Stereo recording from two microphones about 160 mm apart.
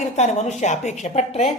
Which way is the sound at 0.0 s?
45° left (ahead or behind).